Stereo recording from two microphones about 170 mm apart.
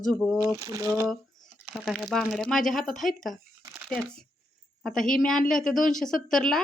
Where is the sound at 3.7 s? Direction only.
Centre (ahead or behind).